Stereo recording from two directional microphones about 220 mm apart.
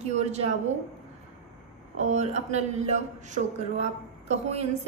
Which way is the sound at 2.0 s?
30° right (ahead or behind).